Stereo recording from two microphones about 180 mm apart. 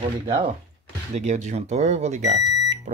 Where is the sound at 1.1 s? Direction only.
40° right (ahead or behind).